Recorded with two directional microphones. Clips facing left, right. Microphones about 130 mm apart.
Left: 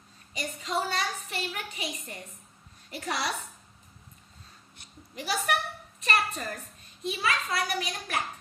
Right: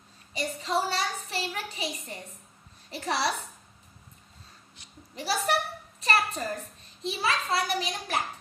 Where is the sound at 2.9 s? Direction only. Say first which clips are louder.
Right 3 dB; 30° right (ahead or behind).